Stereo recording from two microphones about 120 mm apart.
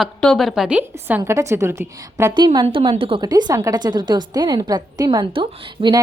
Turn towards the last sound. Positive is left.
turn(degrees=-35)  # may be behind; listen again after turning